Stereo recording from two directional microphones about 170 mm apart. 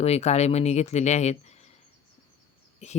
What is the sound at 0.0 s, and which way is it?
Speech, 40° left (ahead or behind).